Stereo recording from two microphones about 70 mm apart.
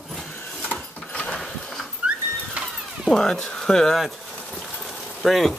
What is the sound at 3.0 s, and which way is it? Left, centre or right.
Speech, centre.